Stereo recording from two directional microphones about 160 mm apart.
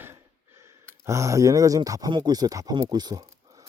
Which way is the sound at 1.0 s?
20° right (ahead or behind).